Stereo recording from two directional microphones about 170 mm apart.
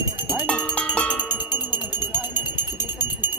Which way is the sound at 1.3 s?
10° right (ahead or behind).